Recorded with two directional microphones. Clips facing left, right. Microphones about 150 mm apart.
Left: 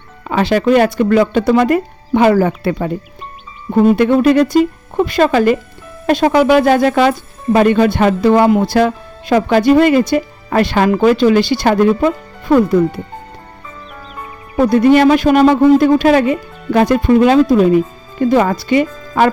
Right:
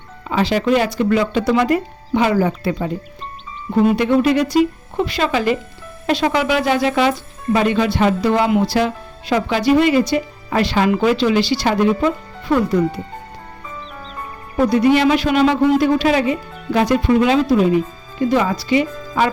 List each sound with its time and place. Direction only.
0.3 s speech: 55° left (ahead or behind)
14.7 s speech: 50° left (ahead or behind)